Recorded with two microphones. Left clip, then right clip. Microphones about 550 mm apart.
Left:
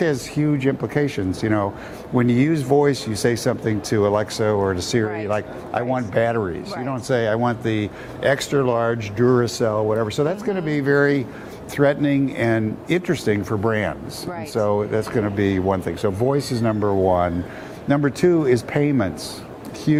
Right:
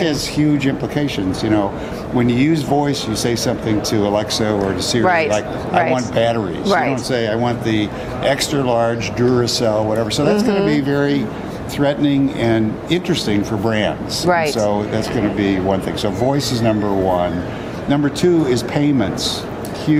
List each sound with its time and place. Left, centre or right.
0.0 s speech: left
7.1 s speech: left